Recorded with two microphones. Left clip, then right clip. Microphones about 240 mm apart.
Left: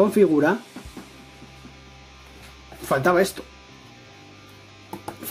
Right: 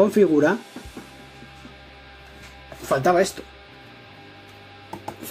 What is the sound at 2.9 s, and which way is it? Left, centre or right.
Speech, centre.